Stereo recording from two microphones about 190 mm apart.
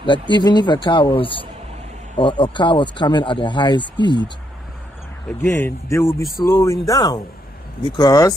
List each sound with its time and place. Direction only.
0.0 s speech: 25° left (ahead or behind)
5.4 s speech: 10° left (ahead or behind)